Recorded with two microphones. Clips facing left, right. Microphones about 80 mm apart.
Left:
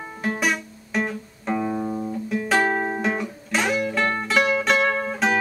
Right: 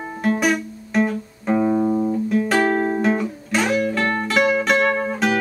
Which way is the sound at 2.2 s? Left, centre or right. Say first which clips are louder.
Even; centre.